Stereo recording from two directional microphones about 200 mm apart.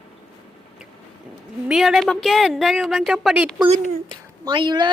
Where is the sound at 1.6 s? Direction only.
Centre (ahead or behind).